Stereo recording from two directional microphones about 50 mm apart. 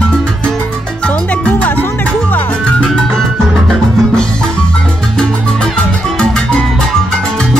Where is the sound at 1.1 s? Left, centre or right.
Left.